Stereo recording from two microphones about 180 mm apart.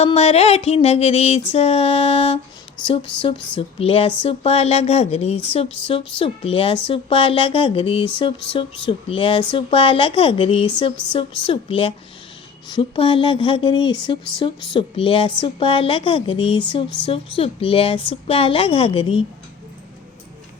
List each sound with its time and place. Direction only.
0.0 s a woman's voice: 35° left (ahead or behind)